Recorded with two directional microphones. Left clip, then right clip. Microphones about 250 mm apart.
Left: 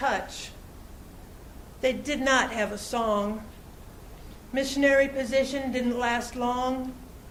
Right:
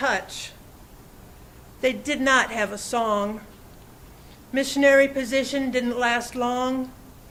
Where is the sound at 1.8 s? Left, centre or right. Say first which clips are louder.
Right 3 dB; right.